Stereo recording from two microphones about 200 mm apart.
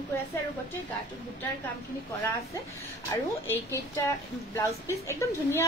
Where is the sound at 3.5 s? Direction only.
15° left (ahead or behind).